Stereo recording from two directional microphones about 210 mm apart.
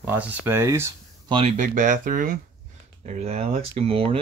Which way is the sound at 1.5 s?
35° right (ahead or behind).